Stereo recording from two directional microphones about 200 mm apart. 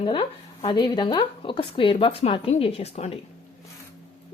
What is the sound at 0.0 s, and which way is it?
Speech, 25° left (ahead or behind).